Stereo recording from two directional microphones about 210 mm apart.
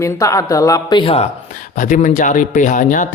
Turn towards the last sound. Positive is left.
turn(degrees=40)  # may be behind; listen again after turning